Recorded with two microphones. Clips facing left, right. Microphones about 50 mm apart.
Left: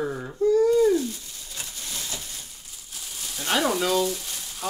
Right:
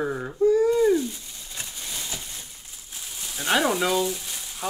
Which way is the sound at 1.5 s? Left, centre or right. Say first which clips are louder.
Right 1 dB; centre.